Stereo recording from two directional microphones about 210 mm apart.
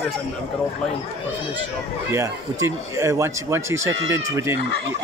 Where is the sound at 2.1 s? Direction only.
15° right (ahead or behind).